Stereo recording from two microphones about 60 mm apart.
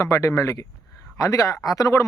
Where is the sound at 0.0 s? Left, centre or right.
Left.